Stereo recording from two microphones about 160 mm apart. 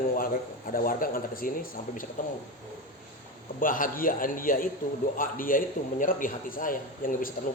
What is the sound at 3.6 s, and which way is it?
A man's voice, 60° left (ahead or behind).